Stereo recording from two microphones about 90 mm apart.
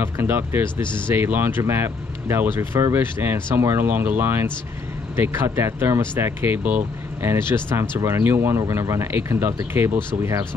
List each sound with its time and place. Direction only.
0.0 s speech: 25° right (ahead or behind)